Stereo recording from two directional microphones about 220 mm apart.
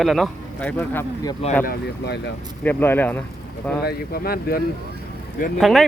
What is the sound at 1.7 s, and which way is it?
Speech, 50° left (ahead or behind).